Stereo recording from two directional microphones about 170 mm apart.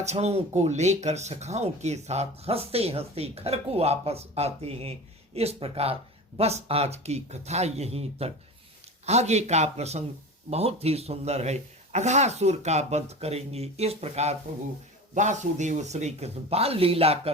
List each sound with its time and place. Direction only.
0.0 s speech: 40° right (ahead or behind)